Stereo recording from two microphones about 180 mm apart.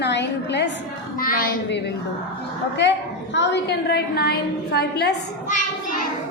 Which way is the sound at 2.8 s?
85° left.